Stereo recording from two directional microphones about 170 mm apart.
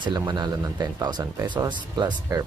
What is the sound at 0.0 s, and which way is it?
Speech, 25° right (ahead or behind).